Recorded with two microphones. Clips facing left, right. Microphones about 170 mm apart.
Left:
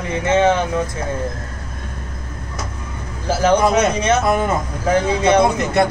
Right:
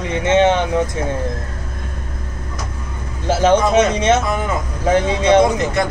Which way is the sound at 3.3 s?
20° right (ahead or behind).